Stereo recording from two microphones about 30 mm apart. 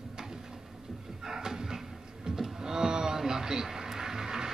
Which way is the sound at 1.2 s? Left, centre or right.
Centre.